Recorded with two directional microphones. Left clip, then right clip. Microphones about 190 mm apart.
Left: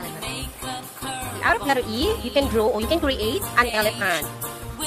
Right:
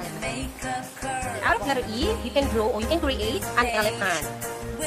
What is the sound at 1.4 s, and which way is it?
Speech, 25° left (ahead or behind).